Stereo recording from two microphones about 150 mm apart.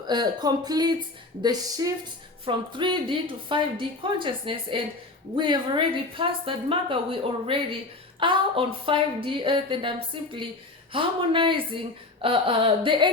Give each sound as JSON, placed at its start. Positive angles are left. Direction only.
{"t": 0.1, "sound": "a woman's voice", "side_deg": -30}